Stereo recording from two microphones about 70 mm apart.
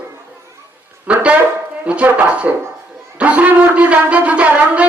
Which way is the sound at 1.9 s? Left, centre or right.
Centre.